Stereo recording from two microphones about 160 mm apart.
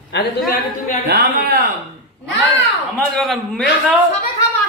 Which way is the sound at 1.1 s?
80° right.